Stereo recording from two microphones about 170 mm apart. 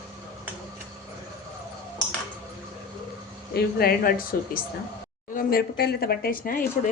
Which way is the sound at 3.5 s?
65° left (ahead or behind).